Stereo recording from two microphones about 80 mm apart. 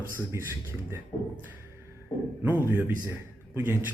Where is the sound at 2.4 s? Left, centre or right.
Right.